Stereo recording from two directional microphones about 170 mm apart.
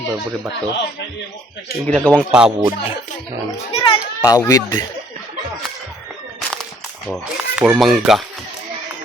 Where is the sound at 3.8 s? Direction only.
20° left (ahead or behind).